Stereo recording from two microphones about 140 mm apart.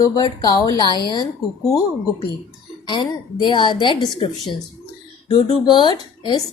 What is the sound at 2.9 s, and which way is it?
A woman's voice, 35° left (ahead or behind).